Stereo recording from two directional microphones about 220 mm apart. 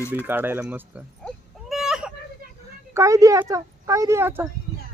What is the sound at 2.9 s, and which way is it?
Speech, 15° right (ahead or behind).